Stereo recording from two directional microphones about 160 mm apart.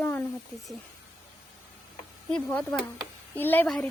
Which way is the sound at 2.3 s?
10° left (ahead or behind).